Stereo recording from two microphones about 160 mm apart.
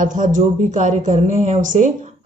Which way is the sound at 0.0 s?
55° right (ahead or behind).